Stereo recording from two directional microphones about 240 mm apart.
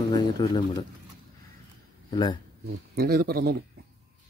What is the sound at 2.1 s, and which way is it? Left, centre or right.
Speech, centre.